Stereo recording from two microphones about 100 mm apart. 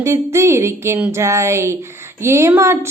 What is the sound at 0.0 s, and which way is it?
A woman's voice, 30° right (ahead or behind).